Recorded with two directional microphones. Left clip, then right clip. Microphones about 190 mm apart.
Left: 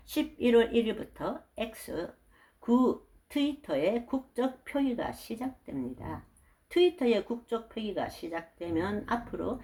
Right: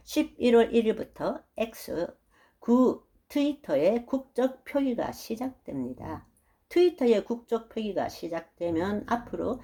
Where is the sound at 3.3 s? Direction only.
40° right (ahead or behind).